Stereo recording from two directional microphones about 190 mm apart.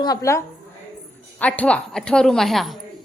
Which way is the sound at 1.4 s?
5° left (ahead or behind).